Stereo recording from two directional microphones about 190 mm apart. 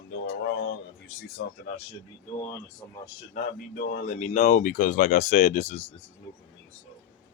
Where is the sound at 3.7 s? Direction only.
50° left (ahead or behind).